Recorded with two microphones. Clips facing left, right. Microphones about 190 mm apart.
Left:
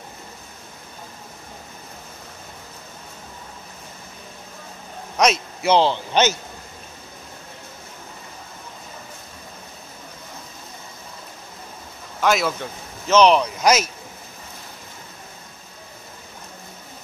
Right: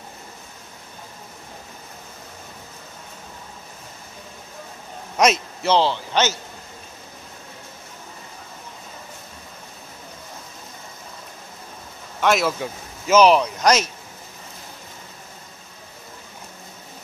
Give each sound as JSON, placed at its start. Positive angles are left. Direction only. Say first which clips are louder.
{"t": 5.1, "sound": "a man's voice", "louder": "right 1 dB", "side_deg": 0}
{"t": 5.6, "sound": "a man's voice", "louder": "left 2 dB", "side_deg": 15}
{"t": 12.2, "sound": "speech", "louder": "right 1 dB", "side_deg": 0}